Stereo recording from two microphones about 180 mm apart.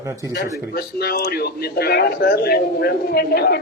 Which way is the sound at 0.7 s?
60° left (ahead or behind).